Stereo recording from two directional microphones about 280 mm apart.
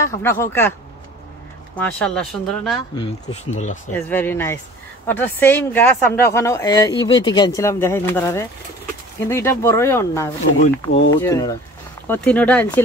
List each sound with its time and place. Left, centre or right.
0.0 s speech: centre
1.8 s speech: centre
3.0 s speech: left
4.1 s speech: centre